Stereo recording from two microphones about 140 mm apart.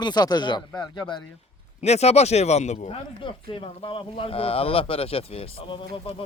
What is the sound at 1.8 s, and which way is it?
Speech, 50° left (ahead or behind).